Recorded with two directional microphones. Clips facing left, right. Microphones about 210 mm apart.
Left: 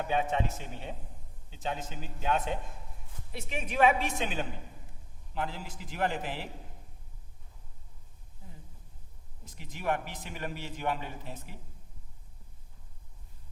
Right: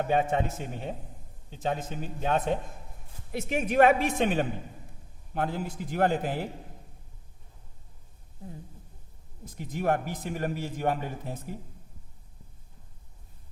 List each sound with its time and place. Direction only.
0.0 s a man's voice: 45° right (ahead or behind)
9.6 s a man's voice: 40° right (ahead or behind)